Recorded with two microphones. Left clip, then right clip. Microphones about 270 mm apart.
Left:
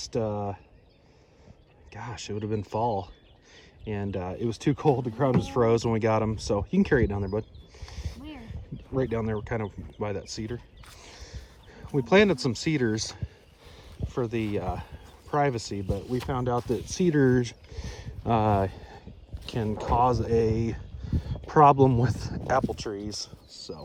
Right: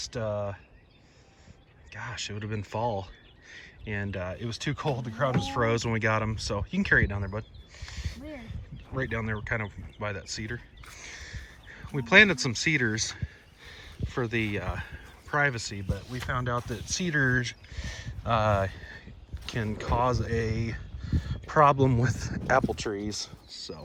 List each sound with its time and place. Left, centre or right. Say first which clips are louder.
0.0 s speech: left 2 dB; left
1.9 s speech: even; left
16.2 s speech: even; left